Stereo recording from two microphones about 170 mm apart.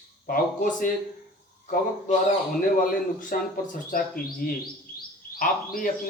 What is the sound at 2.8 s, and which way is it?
A man's voice, 50° left (ahead or behind).